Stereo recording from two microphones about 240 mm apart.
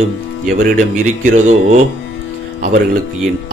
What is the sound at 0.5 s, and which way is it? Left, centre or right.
Speech, right.